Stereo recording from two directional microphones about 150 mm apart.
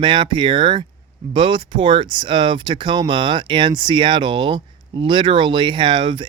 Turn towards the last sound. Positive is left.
turn(degrees=-35)  # may be behind; listen again after turning